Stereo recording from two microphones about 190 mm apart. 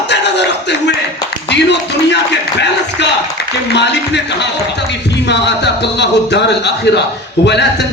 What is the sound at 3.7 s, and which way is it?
Speech, 65° left (ahead or behind).